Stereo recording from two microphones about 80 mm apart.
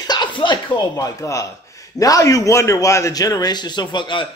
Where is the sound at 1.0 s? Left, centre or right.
Left.